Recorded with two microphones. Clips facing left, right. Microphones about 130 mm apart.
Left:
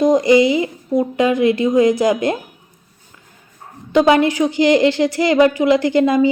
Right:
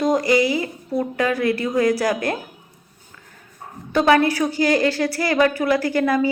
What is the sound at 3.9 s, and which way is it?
Speech, 20° left (ahead or behind).